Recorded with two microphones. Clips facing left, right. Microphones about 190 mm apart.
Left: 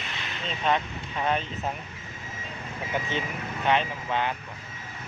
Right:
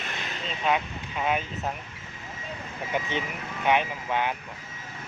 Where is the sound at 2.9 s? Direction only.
15° right (ahead or behind).